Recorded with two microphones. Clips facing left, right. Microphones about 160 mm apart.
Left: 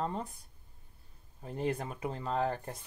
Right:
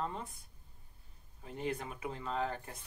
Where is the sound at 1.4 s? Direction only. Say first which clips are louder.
Left 4 dB; 40° left (ahead or behind).